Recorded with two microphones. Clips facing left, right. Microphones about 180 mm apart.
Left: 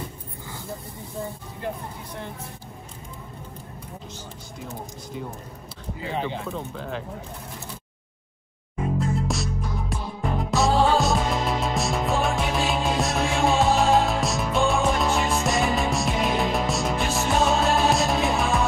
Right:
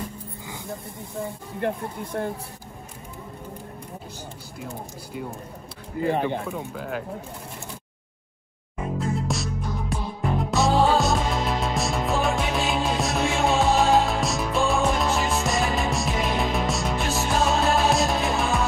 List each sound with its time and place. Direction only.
1.6 s speech: 60° right (ahead or behind)
5.9 s speech: 55° right (ahead or behind)
6.6 s speech: 5° right (ahead or behind)
9.1 s music: centre (ahead or behind)